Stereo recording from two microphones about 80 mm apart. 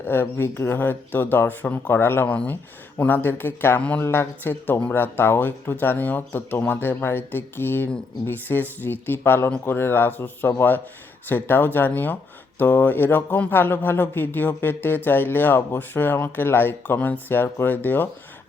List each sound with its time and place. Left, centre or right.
0.0 s speech: left
3.8 s speech: centre
4.0 s speech: left